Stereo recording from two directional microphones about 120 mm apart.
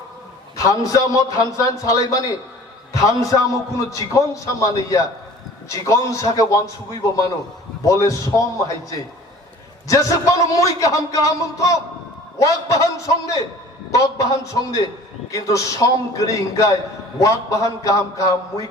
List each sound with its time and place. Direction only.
0.5 s a man's voice: 30° left (ahead or behind)
7.9 s a man's voice: 30° left (ahead or behind)
13.9 s a man's voice: 25° left (ahead or behind)